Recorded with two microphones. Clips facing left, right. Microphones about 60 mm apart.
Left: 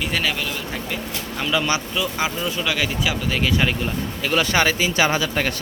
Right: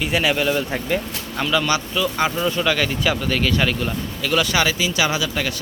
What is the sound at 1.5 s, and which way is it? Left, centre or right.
Speech, left.